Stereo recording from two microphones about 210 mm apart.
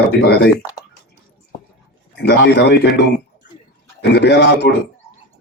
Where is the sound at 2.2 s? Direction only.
55° left (ahead or behind).